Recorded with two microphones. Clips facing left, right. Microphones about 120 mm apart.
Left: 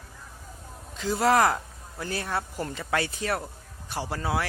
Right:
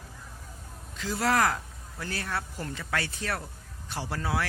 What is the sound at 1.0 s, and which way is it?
Speech, 20° left (ahead or behind).